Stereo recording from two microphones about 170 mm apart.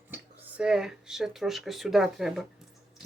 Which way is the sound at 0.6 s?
5° right (ahead or behind).